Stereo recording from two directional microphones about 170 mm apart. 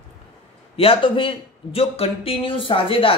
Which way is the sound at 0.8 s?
30° left (ahead or behind).